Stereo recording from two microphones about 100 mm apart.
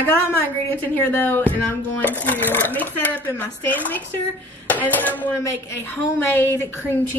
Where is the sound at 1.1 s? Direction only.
20° left (ahead or behind).